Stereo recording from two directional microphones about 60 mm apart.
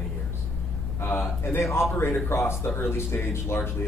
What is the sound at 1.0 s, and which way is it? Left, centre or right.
Speech, left.